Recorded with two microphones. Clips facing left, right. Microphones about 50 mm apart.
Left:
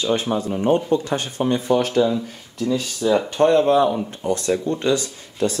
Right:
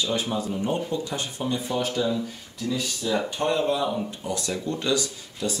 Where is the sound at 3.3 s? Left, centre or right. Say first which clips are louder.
Left 12 dB; left.